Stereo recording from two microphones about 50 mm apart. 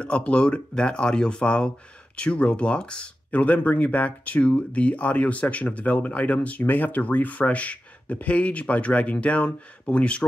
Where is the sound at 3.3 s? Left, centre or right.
Left.